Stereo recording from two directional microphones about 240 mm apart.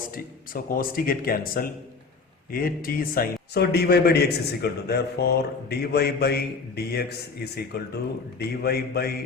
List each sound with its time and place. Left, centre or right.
0.5 s a man's voice: left